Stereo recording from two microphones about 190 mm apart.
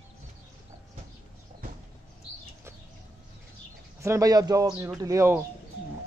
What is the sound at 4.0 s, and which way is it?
Speech, 15° right (ahead or behind).